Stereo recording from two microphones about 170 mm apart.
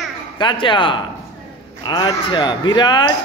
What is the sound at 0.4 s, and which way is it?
Speech, 30° left (ahead or behind).